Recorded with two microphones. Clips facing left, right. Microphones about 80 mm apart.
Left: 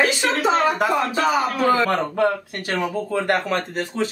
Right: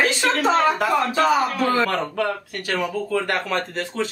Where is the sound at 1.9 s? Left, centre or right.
Left.